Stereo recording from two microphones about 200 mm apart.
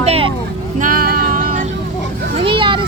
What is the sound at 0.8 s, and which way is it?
Music, 45° right (ahead or behind).